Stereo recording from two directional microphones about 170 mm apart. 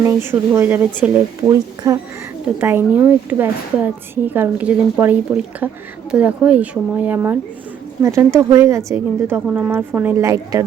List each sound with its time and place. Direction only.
0.0 s speech: 15° right (ahead or behind)